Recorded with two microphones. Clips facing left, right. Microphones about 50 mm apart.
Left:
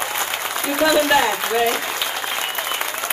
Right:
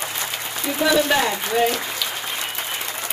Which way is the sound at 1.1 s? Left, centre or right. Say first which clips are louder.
Left 2 dB; centre.